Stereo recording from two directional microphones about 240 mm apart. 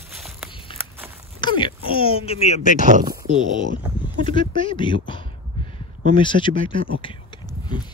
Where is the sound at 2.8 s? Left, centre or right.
Right.